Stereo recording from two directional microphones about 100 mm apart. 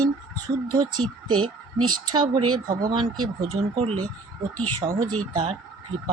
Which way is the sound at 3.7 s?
90° right.